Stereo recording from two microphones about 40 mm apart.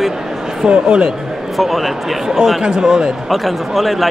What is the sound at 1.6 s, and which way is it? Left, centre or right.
Speech, centre.